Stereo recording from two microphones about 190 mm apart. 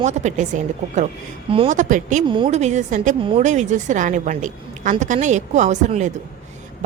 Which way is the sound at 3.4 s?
40° right (ahead or behind).